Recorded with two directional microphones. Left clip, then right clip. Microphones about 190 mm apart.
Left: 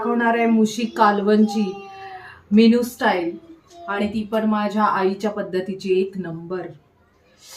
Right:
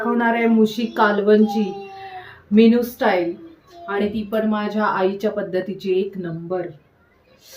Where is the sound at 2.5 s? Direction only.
20° left (ahead or behind).